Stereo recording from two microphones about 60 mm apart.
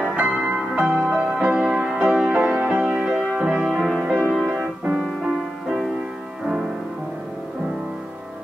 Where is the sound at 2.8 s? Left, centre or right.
Centre.